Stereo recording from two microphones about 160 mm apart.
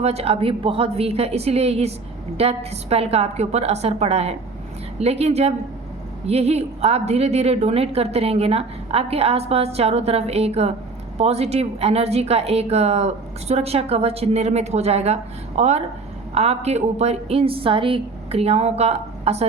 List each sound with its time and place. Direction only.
0.0 s a woman's voice: 40° right (ahead or behind)